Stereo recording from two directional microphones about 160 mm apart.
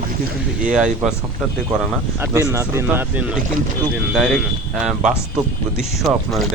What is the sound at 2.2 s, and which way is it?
Speech, 20° right (ahead or behind).